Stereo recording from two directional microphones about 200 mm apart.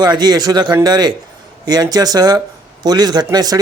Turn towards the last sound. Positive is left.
turn(degrees=-20)  # may be behind; listen again after turning